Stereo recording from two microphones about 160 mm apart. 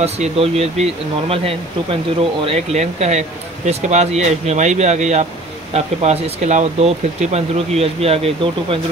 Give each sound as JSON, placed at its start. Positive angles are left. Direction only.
{"t": 0.0, "sound": "speech", "side_deg": -40}